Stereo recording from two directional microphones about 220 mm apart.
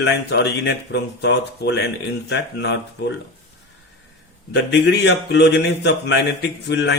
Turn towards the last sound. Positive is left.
turn(degrees=50)  # may be behind; listen again after turning